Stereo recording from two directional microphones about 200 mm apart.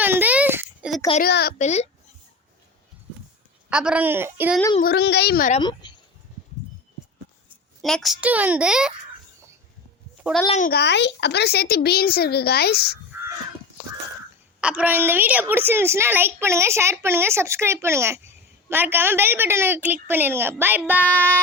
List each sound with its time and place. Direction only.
0.0 s a sound: 10° right (ahead or behind)
1.2 s speech: 50° left (ahead or behind)
1.5 s a child's voice: 35° left (ahead or behind)
3.7 s a woman's voice: 5° right (ahead or behind)
4.8 s speech: 55° left (ahead or behind)
5.5 s speech: 25° left (ahead or behind)
7.8 s a child's voice: centre (ahead or behind)
10.5 s a child's voice: 40° left (ahead or behind)
10.8 s speech: 60° left (ahead or behind)
14.6 s a woman's voice: 5° right (ahead or behind)